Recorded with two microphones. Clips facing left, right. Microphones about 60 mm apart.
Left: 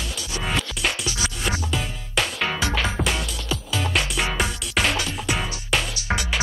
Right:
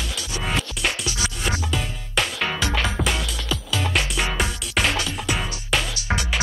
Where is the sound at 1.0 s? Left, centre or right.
Centre.